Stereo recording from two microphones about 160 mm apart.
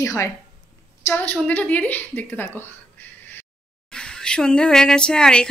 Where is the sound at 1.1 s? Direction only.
10° left (ahead or behind).